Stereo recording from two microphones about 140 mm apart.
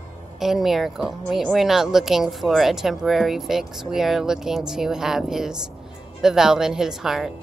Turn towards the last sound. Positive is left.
turn(degrees=-5)  # may be behind; listen again after turning